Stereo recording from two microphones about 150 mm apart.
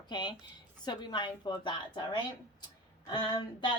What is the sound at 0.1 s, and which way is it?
A woman's voice, 30° left (ahead or behind).